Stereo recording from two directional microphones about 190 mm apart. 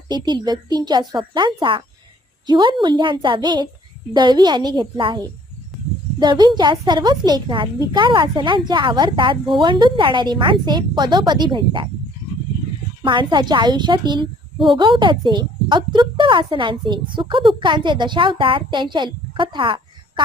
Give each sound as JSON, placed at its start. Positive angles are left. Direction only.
{"t": 0.1, "sound": "a woman's voice", "side_deg": -20}
{"t": 5.7, "sound": "a sound", "side_deg": 0}
{"t": 6.1, "sound": "a woman's voice", "side_deg": -25}
{"t": 13.0, "sound": "a woman's voice", "side_deg": -25}